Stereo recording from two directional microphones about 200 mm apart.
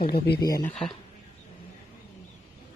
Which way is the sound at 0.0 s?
50° left (ahead or behind).